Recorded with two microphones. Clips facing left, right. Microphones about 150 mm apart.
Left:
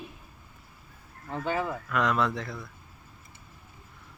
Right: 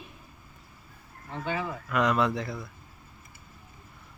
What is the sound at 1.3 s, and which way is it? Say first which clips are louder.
Speech: left 2 dB; 45° left (ahead or behind).